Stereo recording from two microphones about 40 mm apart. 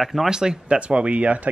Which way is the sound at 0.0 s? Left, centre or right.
Centre.